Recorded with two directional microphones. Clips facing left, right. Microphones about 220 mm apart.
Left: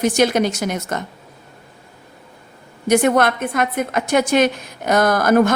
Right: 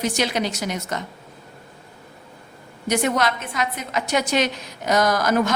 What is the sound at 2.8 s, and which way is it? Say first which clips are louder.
A woman's voice: left 6 dB; 50° left (ahead or behind).